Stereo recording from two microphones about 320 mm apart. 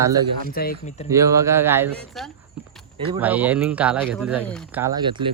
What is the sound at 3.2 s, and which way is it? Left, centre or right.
Speech, centre.